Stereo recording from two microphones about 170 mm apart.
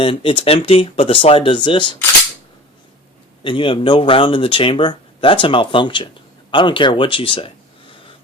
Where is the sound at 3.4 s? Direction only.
30° left (ahead or behind).